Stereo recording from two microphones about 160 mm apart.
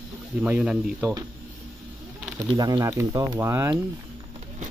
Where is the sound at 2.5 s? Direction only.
25° right (ahead or behind).